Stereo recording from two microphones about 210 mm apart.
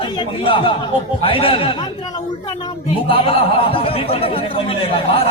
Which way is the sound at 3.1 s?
25° left (ahead or behind).